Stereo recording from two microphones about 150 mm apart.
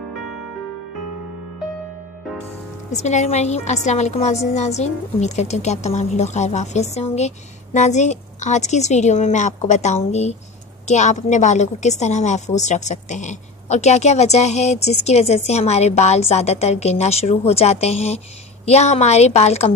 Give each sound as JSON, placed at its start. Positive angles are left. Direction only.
{"t": 2.9, "sound": "a woman's voice", "side_deg": 50}